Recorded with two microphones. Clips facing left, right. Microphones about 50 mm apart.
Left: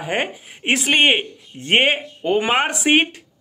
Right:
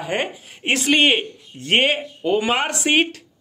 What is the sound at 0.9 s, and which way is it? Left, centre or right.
A man's voice, left.